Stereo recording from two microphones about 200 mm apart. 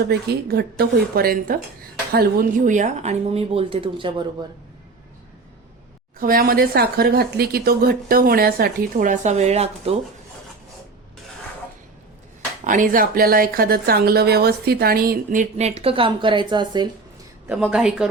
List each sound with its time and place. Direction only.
0.0 s speech: 55° right (ahead or behind); by 4.4 s 25° right (ahead or behind)
6.1 s speech: 45° right (ahead or behind)
12.6 s speech: 40° right (ahead or behind); by 16.9 s 20° right (ahead or behind)
17.5 s a woman's voice: 5° right (ahead or behind)